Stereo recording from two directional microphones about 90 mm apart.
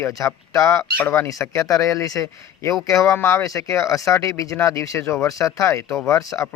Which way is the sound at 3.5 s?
40° left (ahead or behind).